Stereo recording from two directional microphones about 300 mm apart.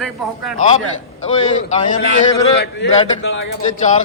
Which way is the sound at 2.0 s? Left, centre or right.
Left.